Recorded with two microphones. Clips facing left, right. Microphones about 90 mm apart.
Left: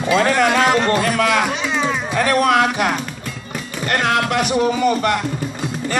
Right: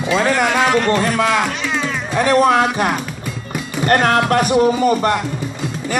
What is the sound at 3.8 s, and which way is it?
A man's voice, 35° right (ahead or behind).